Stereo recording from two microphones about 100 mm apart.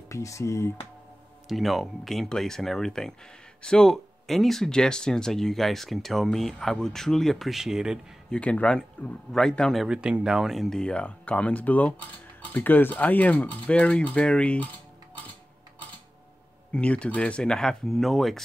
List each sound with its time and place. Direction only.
0.1 s speech: 30° left (ahead or behind)
1.5 s speech: centre (ahead or behind)
8.3 s speech: 10° left (ahead or behind)
9.8 s speech: 10° right (ahead or behind); by 14.7 s 10° left (ahead or behind)
16.7 s speech: 10° left (ahead or behind)